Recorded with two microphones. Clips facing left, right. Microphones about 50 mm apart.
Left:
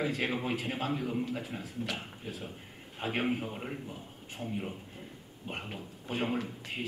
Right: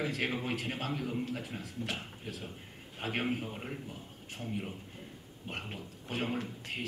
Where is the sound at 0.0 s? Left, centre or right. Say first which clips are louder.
Left 2 dB; centre.